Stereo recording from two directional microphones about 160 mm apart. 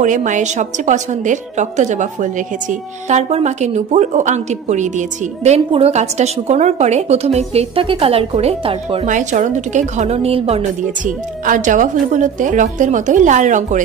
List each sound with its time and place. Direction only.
0.0 s a woman's voice: 50° right (ahead or behind)
9.0 s a woman's voice: 50° right (ahead or behind)
11.1 s a woman's voice: 55° right (ahead or behind)